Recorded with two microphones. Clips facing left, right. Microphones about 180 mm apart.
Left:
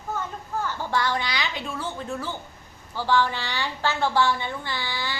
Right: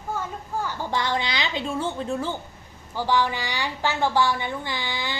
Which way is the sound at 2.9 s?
15° right (ahead or behind).